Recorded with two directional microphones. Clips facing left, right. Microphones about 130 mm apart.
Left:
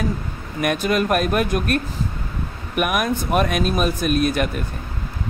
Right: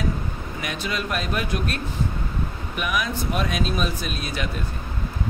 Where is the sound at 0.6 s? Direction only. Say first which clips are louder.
Left 10 dB; 55° left (ahead or behind).